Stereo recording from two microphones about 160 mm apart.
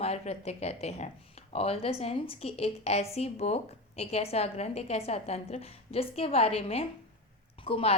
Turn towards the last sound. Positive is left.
turn(degrees=35)  # may be behind; listen again after turning